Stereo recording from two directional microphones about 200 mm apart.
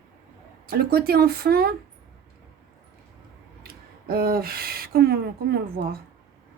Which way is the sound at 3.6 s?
50° right (ahead or behind).